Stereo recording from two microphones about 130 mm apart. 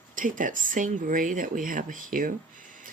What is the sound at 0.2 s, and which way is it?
Speech, 90° right.